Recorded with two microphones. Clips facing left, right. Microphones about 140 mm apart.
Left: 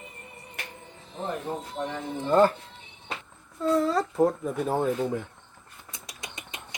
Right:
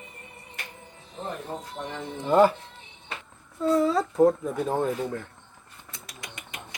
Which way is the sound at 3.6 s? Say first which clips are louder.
Right 1 dB; centre (ahead or behind).